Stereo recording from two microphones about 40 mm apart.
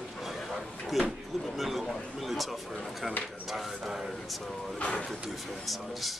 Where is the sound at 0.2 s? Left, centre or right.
Centre.